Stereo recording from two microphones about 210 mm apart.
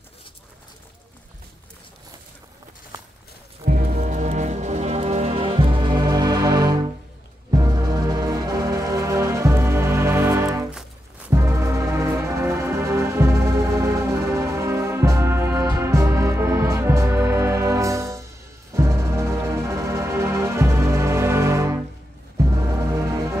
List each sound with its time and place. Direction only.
3.6 s music: 40° right (ahead or behind); by 21.8 s 15° right (ahead or behind)
22.8 s music: 15° right (ahead or behind)